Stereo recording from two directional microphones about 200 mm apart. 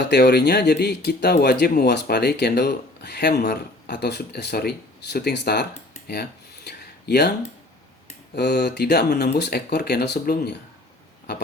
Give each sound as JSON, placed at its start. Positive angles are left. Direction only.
{"t": 0.1, "sound": "speech", "side_deg": 55}
{"t": 6.7, "sound": "a sound", "side_deg": 55}
{"t": 8.4, "sound": "speech", "side_deg": 55}